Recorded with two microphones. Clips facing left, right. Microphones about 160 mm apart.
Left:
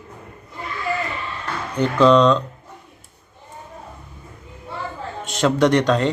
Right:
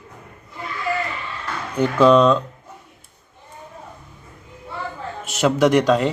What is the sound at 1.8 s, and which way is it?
Speech, 10° right (ahead or behind).